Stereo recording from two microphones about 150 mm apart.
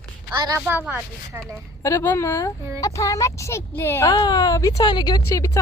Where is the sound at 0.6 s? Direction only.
10° right (ahead or behind).